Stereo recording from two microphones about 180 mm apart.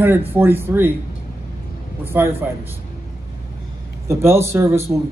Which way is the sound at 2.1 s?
15° right (ahead or behind).